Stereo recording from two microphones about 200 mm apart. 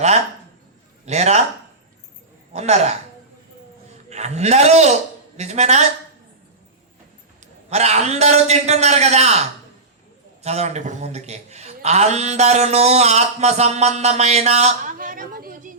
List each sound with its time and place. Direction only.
1.0 s a man's voice: 35° right (ahead or behind)
2.5 s a man's voice: 35° right (ahead or behind)
4.1 s a man's voice: 35° right (ahead or behind)
7.7 s a man's voice: 35° right (ahead or behind)
10.4 s a man's voice: 35° right (ahead or behind)